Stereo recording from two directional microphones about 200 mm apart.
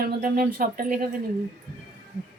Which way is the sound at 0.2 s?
45° right (ahead or behind).